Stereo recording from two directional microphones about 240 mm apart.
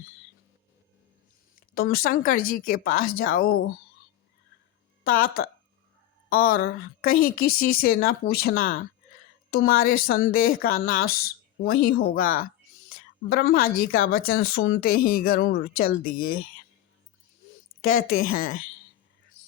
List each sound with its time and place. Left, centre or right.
1.5 s a woman's voice: left
5.0 s speech: left
6.3 s a woman's voice: left
17.8 s a woman's voice: left